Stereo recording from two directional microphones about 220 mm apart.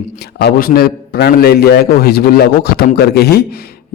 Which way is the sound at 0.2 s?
45° left (ahead or behind).